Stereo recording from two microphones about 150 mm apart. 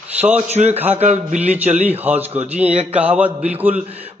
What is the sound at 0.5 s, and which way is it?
Speech, 50° right (ahead or behind).